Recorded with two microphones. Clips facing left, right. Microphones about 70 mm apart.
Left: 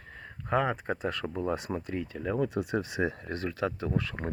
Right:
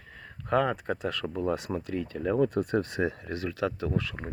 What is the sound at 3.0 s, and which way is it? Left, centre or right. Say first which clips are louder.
Speech: right 1 dB; left.